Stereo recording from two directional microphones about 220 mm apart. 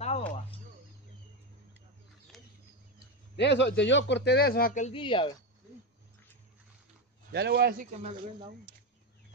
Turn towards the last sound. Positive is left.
turn(degrees=-45)  # may be behind; listen again after turning